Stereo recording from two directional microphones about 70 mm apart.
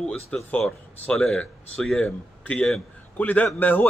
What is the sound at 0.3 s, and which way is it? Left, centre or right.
Speech, centre.